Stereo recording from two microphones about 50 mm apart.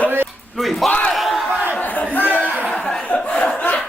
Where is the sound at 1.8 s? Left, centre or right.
Left.